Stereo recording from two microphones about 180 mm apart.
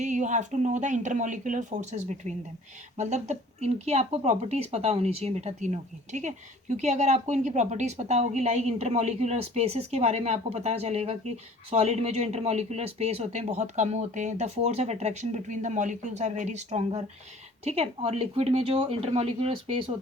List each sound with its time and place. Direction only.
0.0 s speech: 40° right (ahead or behind)